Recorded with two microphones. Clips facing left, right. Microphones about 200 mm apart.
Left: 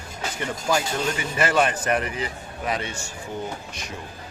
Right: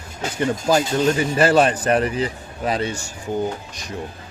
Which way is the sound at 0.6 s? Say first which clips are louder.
Right 6 dB; 35° right (ahead or behind).